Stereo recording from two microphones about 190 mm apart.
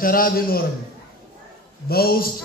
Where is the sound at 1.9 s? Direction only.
55° left (ahead or behind).